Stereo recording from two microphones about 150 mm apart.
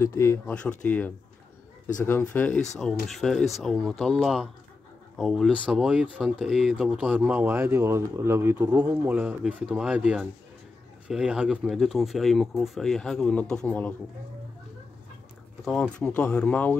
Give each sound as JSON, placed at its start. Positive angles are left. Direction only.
{"t": 0.0, "sound": "speech", "side_deg": 20}
{"t": 15.6, "sound": "speech", "side_deg": 5}